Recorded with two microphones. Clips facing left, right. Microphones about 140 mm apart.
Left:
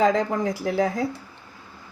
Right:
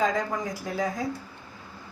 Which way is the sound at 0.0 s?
70° left (ahead or behind).